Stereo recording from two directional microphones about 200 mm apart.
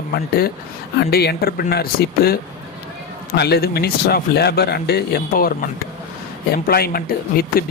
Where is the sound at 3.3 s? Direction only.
55° left (ahead or behind).